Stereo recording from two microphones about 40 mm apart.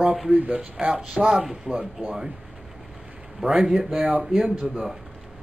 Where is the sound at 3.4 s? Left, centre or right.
Centre.